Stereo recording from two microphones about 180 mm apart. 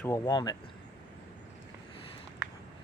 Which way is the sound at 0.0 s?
20° left (ahead or behind).